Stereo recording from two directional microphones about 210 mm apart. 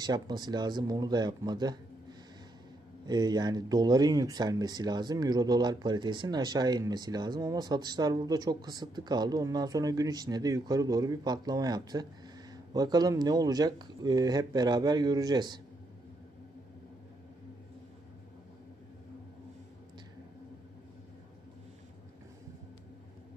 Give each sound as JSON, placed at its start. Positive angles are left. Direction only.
{"t": 0.0, "sound": "speech", "side_deg": -20}
{"t": 3.1, "sound": "speech", "side_deg": -20}